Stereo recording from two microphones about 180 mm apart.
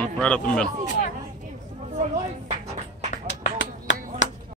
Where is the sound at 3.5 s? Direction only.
90° left.